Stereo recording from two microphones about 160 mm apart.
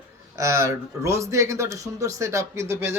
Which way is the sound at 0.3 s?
20° right (ahead or behind).